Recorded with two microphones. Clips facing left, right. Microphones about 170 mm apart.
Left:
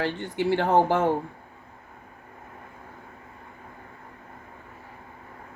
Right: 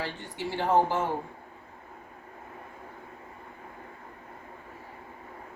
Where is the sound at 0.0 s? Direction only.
65° left (ahead or behind).